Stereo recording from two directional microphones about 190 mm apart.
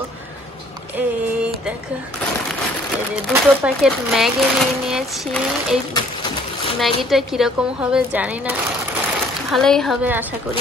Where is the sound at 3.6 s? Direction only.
5° right (ahead or behind).